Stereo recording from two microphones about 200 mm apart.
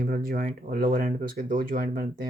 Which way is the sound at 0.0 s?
45° right (ahead or behind).